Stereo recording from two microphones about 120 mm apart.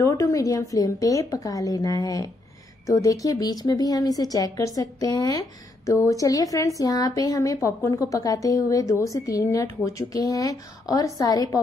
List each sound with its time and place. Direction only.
0.0 s a woman's voice: 25° left (ahead or behind)